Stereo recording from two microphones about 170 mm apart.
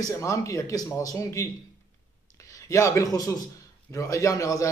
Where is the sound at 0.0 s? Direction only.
15° left (ahead or behind).